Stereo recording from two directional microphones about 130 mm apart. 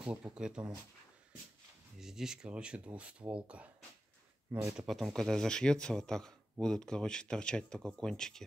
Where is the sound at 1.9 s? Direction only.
5° right (ahead or behind).